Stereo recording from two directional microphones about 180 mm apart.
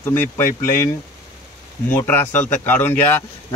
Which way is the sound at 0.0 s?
10° left (ahead or behind).